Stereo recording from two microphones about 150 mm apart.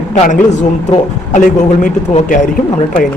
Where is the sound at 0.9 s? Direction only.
55° left (ahead or behind).